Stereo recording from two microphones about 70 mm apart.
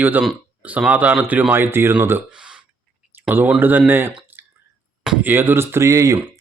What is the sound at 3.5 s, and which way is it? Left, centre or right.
Speech, right.